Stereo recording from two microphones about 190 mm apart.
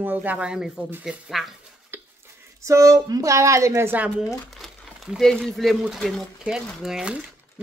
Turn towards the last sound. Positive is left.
turn(degrees=-5)  # may be behind; listen again after turning